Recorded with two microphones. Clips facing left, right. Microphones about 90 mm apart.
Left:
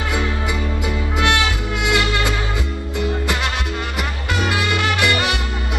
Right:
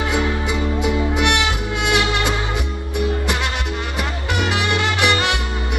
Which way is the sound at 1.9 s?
20° right (ahead or behind).